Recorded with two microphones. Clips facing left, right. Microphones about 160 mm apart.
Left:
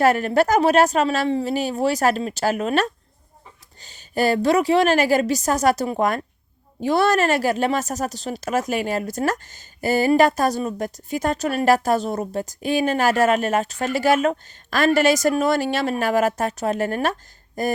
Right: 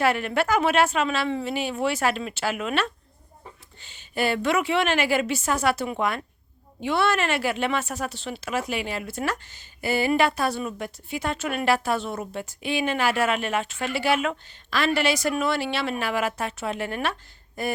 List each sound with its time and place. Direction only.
0.0 s a woman's voice: 40° left (ahead or behind)